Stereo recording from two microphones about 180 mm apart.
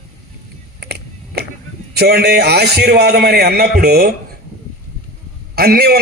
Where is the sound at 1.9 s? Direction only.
60° right (ahead or behind).